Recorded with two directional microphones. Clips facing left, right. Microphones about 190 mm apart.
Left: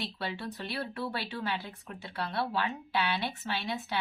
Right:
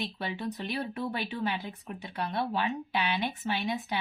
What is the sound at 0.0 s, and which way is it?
Speech, 15° right (ahead or behind).